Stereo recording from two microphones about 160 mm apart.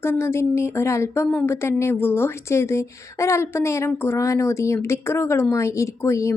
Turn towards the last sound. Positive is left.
turn(degrees=20)  # may be behind; listen again after turning